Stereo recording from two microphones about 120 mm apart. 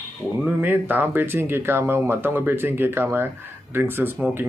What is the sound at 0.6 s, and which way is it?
Speech, 15° right (ahead or behind).